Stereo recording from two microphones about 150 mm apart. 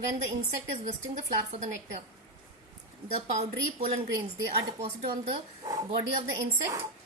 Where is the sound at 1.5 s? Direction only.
45° right (ahead or behind).